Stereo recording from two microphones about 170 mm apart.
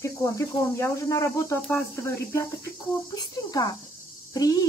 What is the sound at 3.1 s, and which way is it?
Speech, 20° left (ahead or behind).